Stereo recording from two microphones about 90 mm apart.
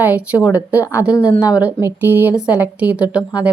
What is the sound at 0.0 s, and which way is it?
A woman's voice, 15° right (ahead or behind).